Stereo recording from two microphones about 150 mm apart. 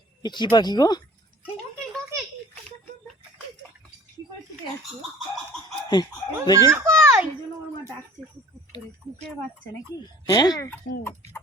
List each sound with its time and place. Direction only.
0.2 s speech: 30° left (ahead or behind)
5.9 s speech: 30° left (ahead or behind)
6.6 s a child's voice: 15° right (ahead or behind)
10.0 s speech: 25° left (ahead or behind)